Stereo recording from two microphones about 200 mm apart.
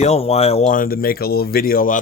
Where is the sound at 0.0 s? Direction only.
30° left (ahead or behind).